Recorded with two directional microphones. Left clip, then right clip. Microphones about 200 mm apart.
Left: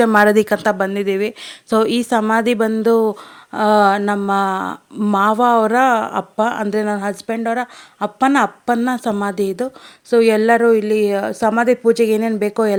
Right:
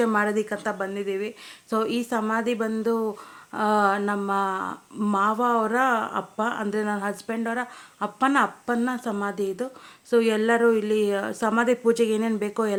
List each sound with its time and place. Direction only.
0.0 s a woman's voice: 40° left (ahead or behind)